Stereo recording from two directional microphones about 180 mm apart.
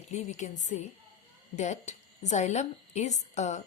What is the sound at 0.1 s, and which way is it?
A woman's voice, 40° left (ahead or behind).